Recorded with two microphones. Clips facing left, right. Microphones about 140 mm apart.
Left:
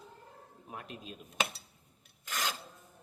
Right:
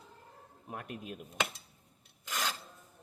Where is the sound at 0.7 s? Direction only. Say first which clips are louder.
Right 3 dB; 55° right (ahead or behind).